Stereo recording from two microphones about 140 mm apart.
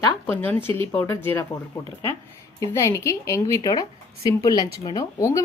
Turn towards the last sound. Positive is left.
turn(degrees=20)  # may be behind; listen again after turning